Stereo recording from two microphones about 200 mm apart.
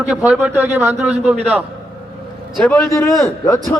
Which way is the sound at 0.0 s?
5° right (ahead or behind).